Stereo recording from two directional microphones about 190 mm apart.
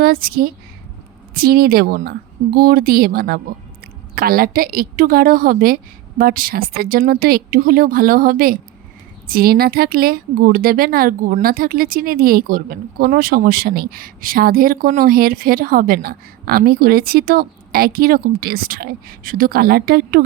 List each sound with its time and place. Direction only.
0.0 s speech: 50° right (ahead or behind)